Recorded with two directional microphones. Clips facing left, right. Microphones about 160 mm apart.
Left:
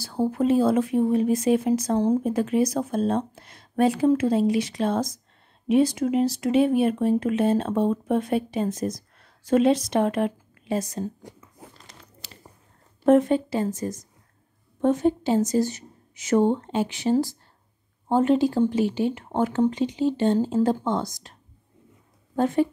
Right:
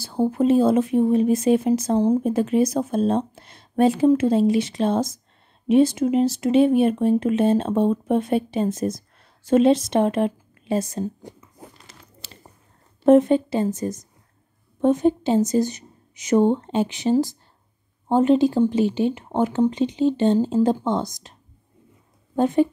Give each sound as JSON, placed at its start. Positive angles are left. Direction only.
{"t": 0.0, "sound": "speech", "side_deg": -25}
{"t": 12.2, "sound": "a sound", "side_deg": -30}
{"t": 13.0, "sound": "a woman's voice", "side_deg": -25}